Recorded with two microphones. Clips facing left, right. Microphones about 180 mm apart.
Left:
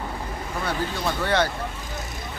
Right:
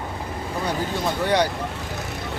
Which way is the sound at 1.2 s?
15° right (ahead or behind).